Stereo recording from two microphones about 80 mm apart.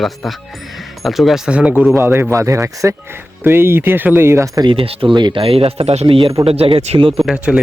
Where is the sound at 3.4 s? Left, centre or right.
Right.